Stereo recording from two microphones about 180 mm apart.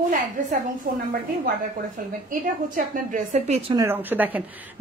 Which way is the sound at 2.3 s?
45° right (ahead or behind).